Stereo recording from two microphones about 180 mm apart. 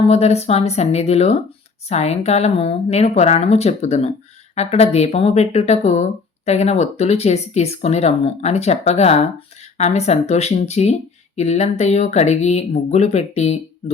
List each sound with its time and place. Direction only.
0.0 s speech: 35° left (ahead or behind)